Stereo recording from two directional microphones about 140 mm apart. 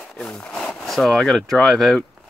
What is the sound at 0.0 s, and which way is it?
Speech, 5° left (ahead or behind).